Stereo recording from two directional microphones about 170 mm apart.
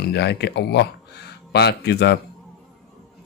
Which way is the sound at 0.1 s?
75° left (ahead or behind).